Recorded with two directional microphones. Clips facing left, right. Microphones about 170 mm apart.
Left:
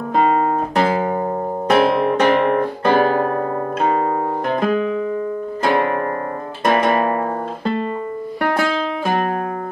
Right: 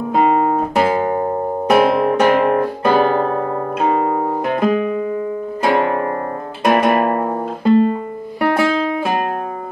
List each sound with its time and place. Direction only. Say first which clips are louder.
0.1 s music: right 2 dB; 5° right (ahead or behind)
1.7 s guitar: right 2 dB; 10° right (ahead or behind)
3.8 s music: right 2 dB; 10° right (ahead or behind)
5.7 s music: right 2 dB; 20° right (ahead or behind)
6.6 s guitar: right 2 dB; 10° right (ahead or behind)
8.4 s music: right 4 dB; 10° right (ahead or behind)